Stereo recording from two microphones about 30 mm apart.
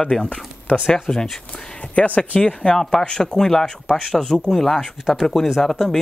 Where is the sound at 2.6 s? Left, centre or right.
Left.